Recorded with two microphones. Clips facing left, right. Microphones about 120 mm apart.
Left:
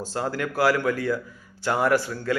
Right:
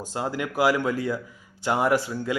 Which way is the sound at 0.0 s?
20° right (ahead or behind).